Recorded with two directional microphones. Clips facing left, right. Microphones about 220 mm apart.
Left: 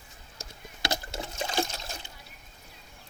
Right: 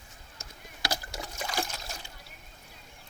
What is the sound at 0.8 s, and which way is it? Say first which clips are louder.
Rowboat: left 2 dB; 25° left (ahead or behind).